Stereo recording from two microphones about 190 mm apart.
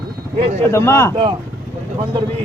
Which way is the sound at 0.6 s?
15° left (ahead or behind).